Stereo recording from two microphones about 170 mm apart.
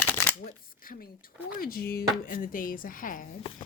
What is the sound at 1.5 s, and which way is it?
Speech, 60° left (ahead or behind).